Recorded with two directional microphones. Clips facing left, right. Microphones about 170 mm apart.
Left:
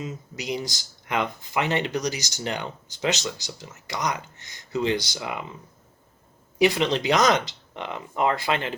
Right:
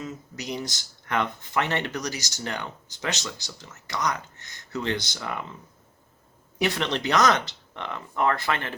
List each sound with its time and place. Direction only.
0.0 s speech: 10° left (ahead or behind)
6.6 s speech: 10° left (ahead or behind)